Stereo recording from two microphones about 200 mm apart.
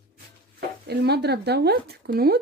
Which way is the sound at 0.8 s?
55° right (ahead or behind).